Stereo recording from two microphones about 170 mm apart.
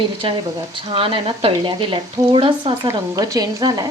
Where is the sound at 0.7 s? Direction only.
30° right (ahead or behind).